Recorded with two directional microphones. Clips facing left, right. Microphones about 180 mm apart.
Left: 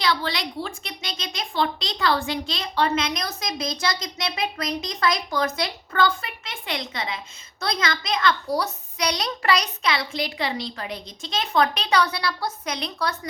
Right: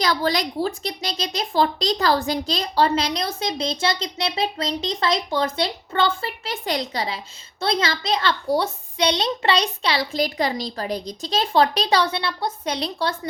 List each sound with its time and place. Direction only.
0.0 s a child's voice: 40° right (ahead or behind)